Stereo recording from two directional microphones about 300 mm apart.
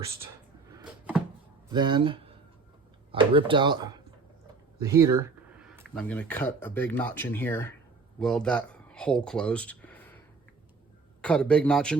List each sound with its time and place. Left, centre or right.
0.8 s a sound: centre
1.7 s speech: centre
5.9 s speech: centre
11.2 s speech: centre